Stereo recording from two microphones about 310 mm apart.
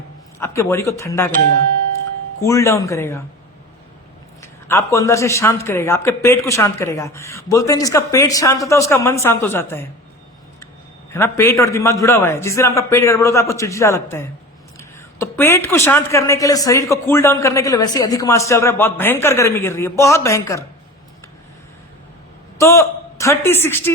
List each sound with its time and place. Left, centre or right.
0.3 s a man's voice: centre
2.4 s a man's voice: centre
4.7 s a man's voice: centre
11.1 s a man's voice: centre
22.5 s a woman's voice: centre